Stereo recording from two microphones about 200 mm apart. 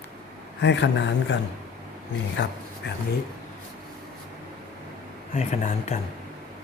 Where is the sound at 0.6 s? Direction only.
60° left (ahead or behind).